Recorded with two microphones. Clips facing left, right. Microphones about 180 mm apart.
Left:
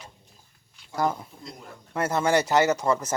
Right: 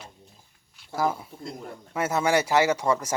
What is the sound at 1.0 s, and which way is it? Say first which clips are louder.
Speech: even; 5° right (ahead or behind).